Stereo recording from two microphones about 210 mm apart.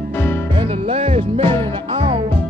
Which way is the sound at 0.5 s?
25° right (ahead or behind).